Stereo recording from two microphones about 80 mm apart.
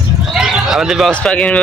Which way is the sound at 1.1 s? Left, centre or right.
Centre.